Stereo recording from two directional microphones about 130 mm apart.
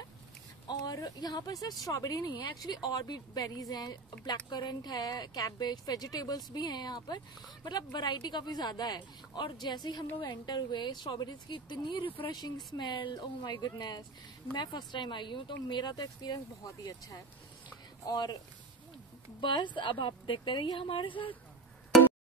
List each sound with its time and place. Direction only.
0.7 s speech: 30° left (ahead or behind)
19.4 s speech: 35° left (ahead or behind)